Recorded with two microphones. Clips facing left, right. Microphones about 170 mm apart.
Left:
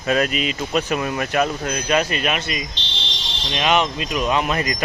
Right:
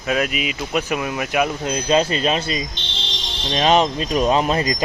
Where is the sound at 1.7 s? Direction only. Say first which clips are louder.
Right 3 dB; 25° right (ahead or behind).